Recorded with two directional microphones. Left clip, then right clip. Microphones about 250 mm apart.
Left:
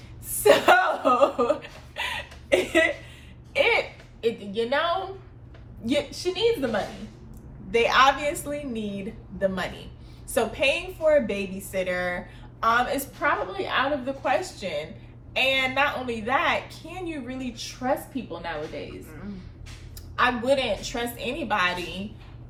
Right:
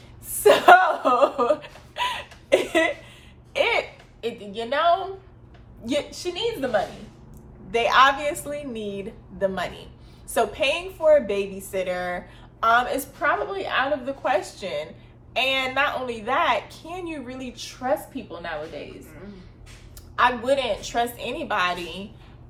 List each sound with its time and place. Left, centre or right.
0.4 s a sound: centre
5.8 s a woman's voice: centre
7.7 s a woman's voice: centre
10.3 s a woman's voice: centre
20.1 s a woman's voice: centre